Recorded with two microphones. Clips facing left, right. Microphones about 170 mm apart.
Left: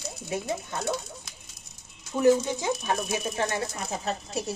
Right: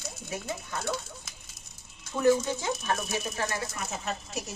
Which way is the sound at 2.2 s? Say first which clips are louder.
Left 3 dB; 15° left (ahead or behind).